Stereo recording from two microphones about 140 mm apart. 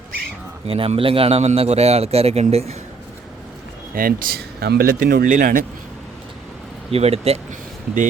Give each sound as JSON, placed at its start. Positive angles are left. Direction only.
{"t": 0.7, "sound": "a man's voice", "side_deg": -40}
{"t": 3.9, "sound": "speech", "side_deg": -90}
{"t": 6.9, "sound": "a man's voice", "side_deg": -45}